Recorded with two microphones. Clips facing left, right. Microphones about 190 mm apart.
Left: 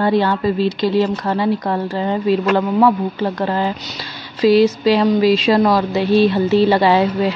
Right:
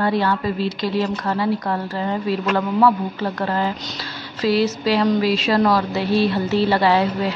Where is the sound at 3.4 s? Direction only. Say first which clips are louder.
Left 3 dB; 20° left (ahead or behind).